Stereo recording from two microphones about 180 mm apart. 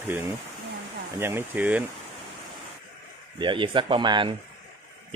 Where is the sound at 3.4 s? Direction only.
25° right (ahead or behind).